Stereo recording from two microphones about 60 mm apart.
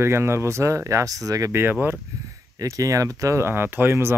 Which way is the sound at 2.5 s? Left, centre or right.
Right.